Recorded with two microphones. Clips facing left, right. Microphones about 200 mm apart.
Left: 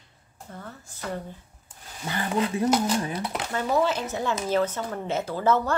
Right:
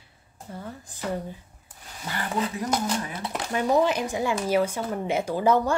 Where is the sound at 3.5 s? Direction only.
15° right (ahead or behind).